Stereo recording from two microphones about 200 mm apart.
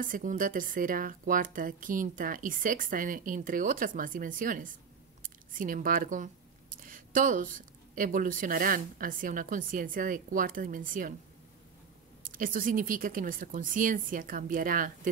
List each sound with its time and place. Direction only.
0.0 s speech: 40° right (ahead or behind)
12.2 s speech: 45° right (ahead or behind)